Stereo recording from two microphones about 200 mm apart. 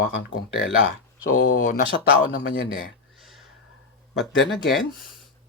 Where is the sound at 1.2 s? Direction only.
40° left (ahead or behind).